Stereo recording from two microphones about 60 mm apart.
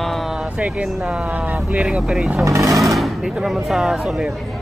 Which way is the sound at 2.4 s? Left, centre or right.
Right.